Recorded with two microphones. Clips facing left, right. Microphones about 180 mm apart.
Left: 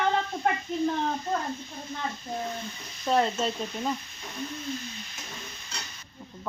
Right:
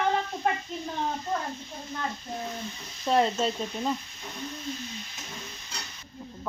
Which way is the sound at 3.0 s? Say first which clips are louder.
Right 1 dB; centre (ahead or behind).